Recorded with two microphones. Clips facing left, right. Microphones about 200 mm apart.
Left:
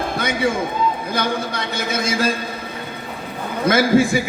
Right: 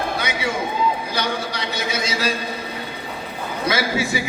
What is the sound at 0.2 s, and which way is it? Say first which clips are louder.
A man's voice: left 4 dB; 50° left (ahead or behind).